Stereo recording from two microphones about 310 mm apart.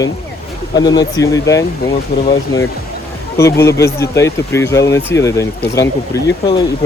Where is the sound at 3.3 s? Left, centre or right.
Centre.